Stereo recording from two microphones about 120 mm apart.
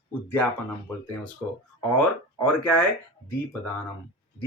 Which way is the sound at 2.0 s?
10° left (ahead or behind).